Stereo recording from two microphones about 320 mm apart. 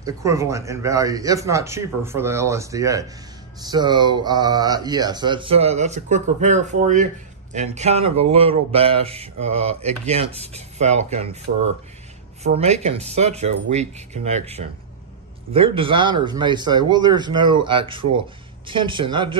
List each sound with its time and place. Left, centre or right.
0.0 s a man's voice: centre
12.5 s a man's voice: centre